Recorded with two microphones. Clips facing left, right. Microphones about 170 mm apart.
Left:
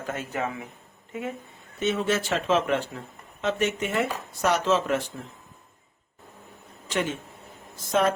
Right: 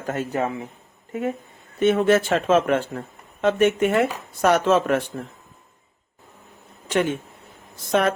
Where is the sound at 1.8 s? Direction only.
55° right (ahead or behind).